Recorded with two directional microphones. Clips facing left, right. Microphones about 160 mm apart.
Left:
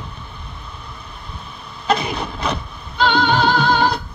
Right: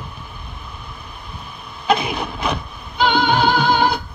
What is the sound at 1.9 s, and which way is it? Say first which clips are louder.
Vehicle: right 1 dB; 5° right (ahead or behind).